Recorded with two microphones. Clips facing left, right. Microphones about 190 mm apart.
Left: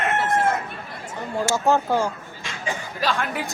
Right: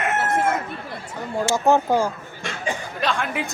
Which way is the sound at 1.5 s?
15° right (ahead or behind).